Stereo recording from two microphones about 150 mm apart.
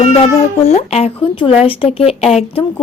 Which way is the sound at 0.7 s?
45° left (ahead or behind).